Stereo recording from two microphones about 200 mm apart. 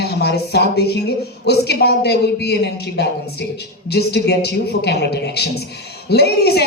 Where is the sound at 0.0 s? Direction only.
55° left (ahead or behind).